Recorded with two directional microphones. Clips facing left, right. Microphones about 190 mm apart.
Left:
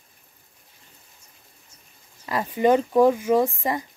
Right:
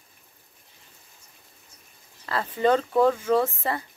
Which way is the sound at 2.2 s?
15° left (ahead or behind).